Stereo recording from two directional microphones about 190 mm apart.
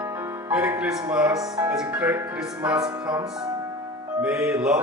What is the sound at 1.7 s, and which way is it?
Speech, 5° right (ahead or behind).